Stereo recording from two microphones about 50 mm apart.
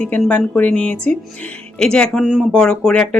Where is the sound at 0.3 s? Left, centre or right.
Left.